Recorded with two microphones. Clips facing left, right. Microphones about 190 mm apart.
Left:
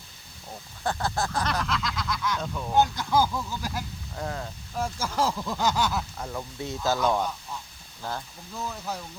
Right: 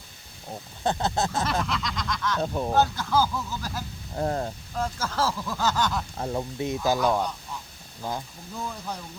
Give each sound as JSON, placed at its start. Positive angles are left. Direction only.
{"t": 0.9, "sound": "a sound", "side_deg": -20}
{"t": 1.6, "sound": "a sound", "side_deg": 0}
{"t": 2.4, "sound": "speech", "side_deg": -35}
{"t": 2.7, "sound": "speech", "side_deg": 15}
{"t": 4.1, "sound": "speech", "side_deg": -35}
{"t": 4.8, "sound": "speech", "side_deg": 10}
{"t": 6.1, "sound": "speech", "side_deg": -35}
{"t": 6.6, "sound": "speech", "side_deg": -15}
{"t": 7.0, "sound": "speech", "side_deg": 0}
{"t": 8.0, "sound": "speech", "side_deg": -15}
{"t": 8.5, "sound": "speech", "side_deg": 5}